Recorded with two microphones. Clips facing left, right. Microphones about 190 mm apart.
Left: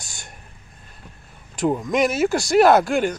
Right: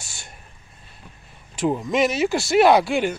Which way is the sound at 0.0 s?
15° left (ahead or behind).